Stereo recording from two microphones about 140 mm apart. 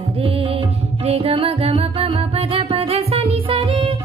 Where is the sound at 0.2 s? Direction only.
40° right (ahead or behind).